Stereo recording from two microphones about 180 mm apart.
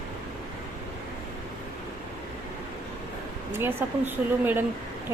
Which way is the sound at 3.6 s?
10° right (ahead or behind).